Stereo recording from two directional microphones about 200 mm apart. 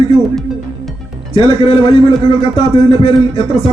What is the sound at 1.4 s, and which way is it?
Speech, 25° left (ahead or behind).